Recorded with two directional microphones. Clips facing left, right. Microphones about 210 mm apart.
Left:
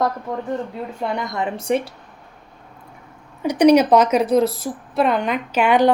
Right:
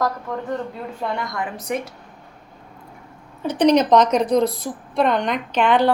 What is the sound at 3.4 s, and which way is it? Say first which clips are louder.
A woman's voice: left 3 dB; 10° left (ahead or behind).